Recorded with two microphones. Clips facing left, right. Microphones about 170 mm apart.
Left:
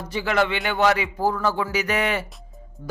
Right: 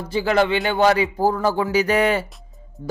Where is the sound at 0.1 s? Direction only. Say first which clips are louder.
Right 4 dB; 30° right (ahead or behind).